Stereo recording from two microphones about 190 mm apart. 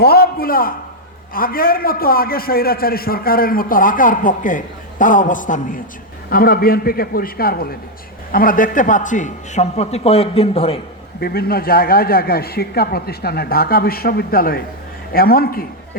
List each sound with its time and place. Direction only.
0.0 s a man's voice: 55° left (ahead or behind); by 10.8 s 30° left (ahead or behind)
11.2 s a man's voice: 55° left (ahead or behind)